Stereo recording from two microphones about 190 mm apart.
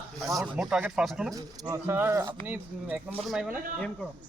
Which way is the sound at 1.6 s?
15° right (ahead or behind).